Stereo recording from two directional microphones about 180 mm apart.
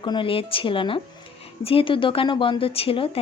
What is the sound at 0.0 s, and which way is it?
Speech, 25° left (ahead or behind).